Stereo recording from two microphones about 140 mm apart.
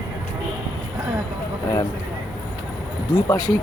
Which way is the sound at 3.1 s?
25° left (ahead or behind).